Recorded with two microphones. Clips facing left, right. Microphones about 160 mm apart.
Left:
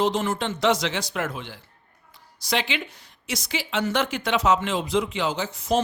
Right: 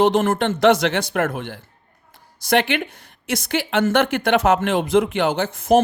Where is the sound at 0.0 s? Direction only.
55° right (ahead or behind).